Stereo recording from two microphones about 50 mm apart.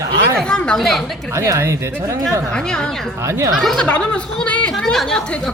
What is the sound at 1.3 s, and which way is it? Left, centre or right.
Speech, right.